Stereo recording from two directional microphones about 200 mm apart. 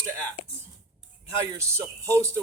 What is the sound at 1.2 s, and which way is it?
A man's voice, 15° right (ahead or behind).